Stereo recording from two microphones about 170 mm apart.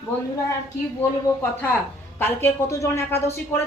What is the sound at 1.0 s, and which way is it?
A woman's voice, 10° left (ahead or behind).